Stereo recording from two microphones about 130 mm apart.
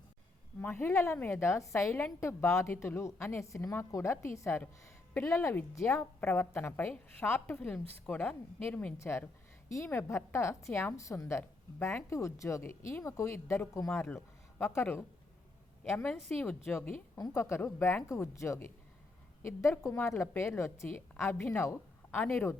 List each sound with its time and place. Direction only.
0.6 s a woman's voice: 15° left (ahead or behind)
16.3 s a woman's voice: 15° left (ahead or behind)